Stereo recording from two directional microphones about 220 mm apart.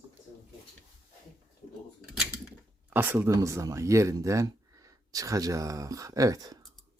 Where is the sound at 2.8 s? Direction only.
10° right (ahead or behind).